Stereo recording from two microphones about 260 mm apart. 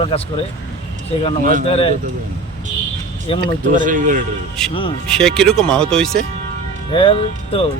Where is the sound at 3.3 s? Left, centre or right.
Left.